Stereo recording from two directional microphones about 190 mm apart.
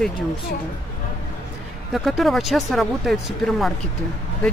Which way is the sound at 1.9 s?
Centre (ahead or behind).